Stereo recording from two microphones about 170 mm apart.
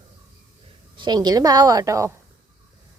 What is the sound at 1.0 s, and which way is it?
A woman's voice, 25° right (ahead or behind).